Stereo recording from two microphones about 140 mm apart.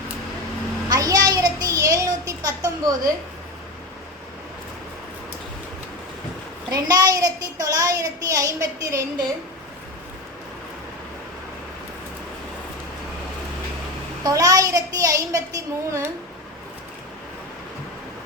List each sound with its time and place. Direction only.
0.9 s a sound: 25° right (ahead or behind)
6.7 s a child's voice: 25° right (ahead or behind)
14.3 s a child's voice: 25° right (ahead or behind)